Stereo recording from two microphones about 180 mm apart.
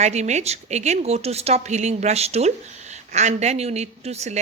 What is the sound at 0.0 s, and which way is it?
A woman's voice, 40° right (ahead or behind).